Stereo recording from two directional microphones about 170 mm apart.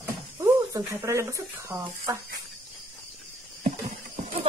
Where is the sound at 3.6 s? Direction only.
50° right (ahead or behind).